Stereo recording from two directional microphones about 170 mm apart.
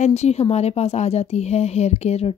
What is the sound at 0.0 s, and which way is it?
A woman's voice, 40° left (ahead or behind).